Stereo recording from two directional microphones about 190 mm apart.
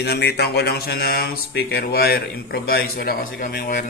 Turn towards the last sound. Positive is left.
turn(degrees=45)  # may be behind; listen again after turning